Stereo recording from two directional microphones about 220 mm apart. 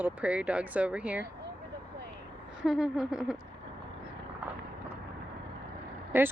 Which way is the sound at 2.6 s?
Centre (ahead or behind).